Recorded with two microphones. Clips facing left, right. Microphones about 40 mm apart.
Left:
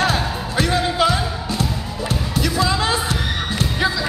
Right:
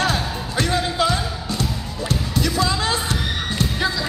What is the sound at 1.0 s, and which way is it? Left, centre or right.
Music, left.